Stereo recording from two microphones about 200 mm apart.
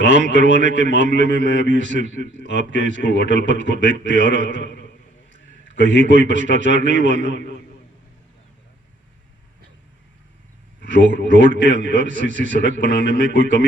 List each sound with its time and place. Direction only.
0.0 s a man's voice: 40° right (ahead or behind)
10.8 s a man's voice: 40° right (ahead or behind)